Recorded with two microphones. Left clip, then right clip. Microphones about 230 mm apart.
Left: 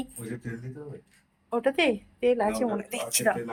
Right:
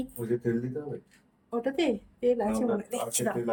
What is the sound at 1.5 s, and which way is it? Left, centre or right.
A woman's voice, centre.